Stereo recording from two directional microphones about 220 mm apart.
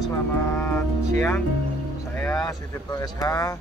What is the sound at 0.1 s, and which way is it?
Vehicle, 10° left (ahead or behind).